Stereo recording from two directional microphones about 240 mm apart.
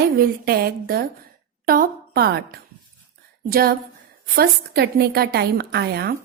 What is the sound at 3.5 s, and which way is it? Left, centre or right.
A woman's voice, right.